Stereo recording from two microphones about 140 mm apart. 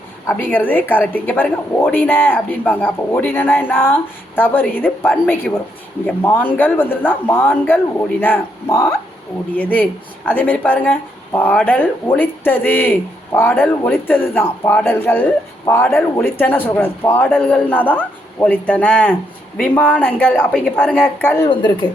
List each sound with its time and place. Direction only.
0.3 s speech: 15° left (ahead or behind)
21.5 s speech: 35° left (ahead or behind)